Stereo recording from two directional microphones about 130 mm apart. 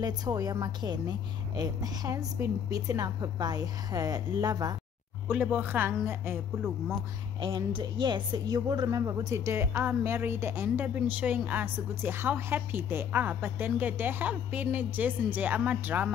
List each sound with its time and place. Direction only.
0.0 s a woman's voice: 30° right (ahead or behind)
5.3 s a woman's voice: 15° right (ahead or behind)
7.3 s a woman's voice: 35° right (ahead or behind); by 16.1 s 15° right (ahead or behind)